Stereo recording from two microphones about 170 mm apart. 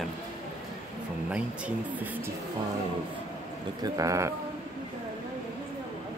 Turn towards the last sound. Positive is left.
turn(degrees=-20)  # may be behind; listen again after turning